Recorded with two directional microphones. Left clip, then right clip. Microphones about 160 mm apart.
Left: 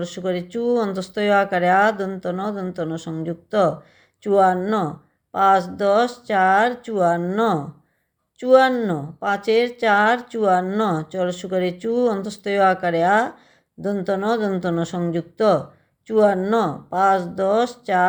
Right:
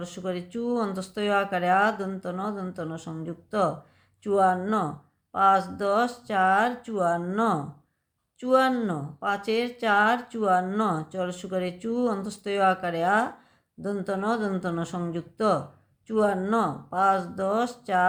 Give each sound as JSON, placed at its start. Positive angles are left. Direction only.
{"t": 0.0, "sound": "a woman's voice", "side_deg": 30}